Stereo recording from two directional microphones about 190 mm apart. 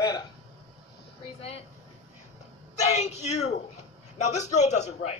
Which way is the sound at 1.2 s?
30° left (ahead or behind).